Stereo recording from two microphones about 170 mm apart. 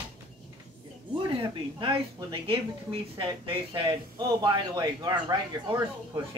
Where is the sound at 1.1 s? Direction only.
30° right (ahead or behind).